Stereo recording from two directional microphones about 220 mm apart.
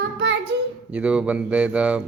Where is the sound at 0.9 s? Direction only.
5° right (ahead or behind).